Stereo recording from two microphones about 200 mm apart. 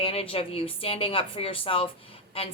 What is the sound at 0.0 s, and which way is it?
A woman's voice, 30° left (ahead or behind).